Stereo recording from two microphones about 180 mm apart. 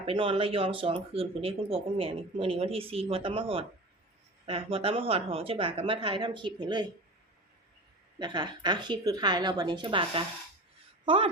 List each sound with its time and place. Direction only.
0.0 s speech: 30° right (ahead or behind)
8.2 s a woman's voice: 25° right (ahead or behind)